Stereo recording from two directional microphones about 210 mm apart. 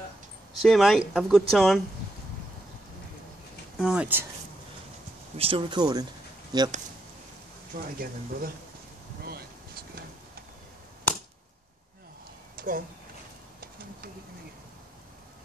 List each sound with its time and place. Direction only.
0.7 s speech: centre (ahead or behind)
3.7 s speech: 5° right (ahead or behind)
5.4 s speech: 25° right (ahead or behind)
7.7 s speech: 45° right (ahead or behind)
9.2 s a sound: 45° right (ahead or behind)
12.5 s a sound: 40° right (ahead or behind)